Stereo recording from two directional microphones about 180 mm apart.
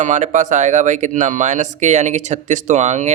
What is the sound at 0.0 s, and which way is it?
Speech, 40° right (ahead or behind).